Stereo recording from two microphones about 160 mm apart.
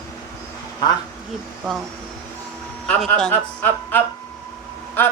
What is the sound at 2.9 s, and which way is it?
Speech, 5° left (ahead or behind).